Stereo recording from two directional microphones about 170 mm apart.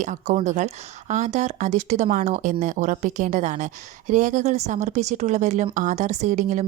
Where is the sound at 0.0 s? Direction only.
45° right (ahead or behind).